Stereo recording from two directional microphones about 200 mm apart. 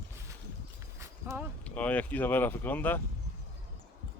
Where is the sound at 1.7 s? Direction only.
10° left (ahead or behind).